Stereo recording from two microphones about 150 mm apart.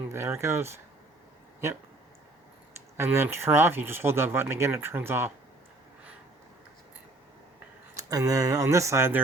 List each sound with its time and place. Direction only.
0.1 s speech: 15° right (ahead or behind)
3.0 s speech: 15° right (ahead or behind)
7.9 s speech: 20° right (ahead or behind)